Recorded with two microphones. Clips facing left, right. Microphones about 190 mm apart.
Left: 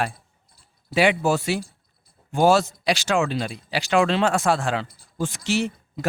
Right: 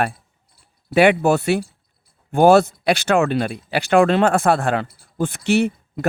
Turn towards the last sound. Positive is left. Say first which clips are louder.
# right 6 dB
turn(degrees=-60)  # may be behind; listen again after turning